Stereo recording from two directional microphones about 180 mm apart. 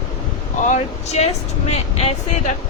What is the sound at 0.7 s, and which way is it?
Speech, 35° left (ahead or behind).